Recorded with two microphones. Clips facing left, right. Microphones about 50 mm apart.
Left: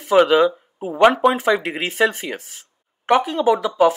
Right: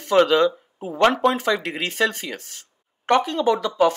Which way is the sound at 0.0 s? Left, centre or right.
Centre.